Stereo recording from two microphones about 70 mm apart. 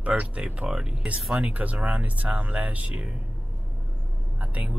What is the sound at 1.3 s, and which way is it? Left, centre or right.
Speech, right.